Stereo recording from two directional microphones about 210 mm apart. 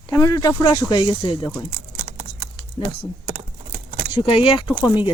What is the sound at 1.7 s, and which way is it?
Computer keyboard, 45° right (ahead or behind).